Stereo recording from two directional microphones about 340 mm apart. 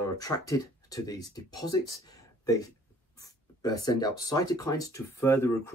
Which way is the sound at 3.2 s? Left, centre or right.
Centre.